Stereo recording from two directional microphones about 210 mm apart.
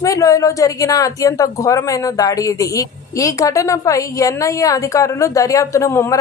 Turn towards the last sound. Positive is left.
turn(degrees=15)  # may be behind; listen again after turning